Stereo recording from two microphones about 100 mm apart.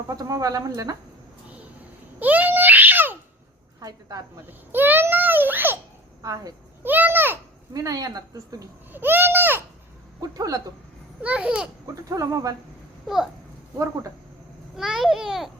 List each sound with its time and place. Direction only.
0.1 s speech: 35° right (ahead or behind)
1.5 s a sound: 15° right (ahead or behind)
3.8 s a woman's voice: 40° right (ahead or behind)
4.7 s a sound: 20° right (ahead or behind)
6.2 s speech: 40° right (ahead or behind)
6.8 s a sound: 20° right (ahead or behind)
7.7 s speech: 35° right (ahead or behind)
8.9 s a sound: 20° right (ahead or behind)
10.2 s speech: 40° right (ahead or behind)
11.2 s babbling: 10° right (ahead or behind)
12.0 s speech: 35° right (ahead or behind)
13.1 s a child's voice: 5° right (ahead or behind)
13.7 s speech: 30° right (ahead or behind)
14.8 s babbling: 5° right (ahead or behind)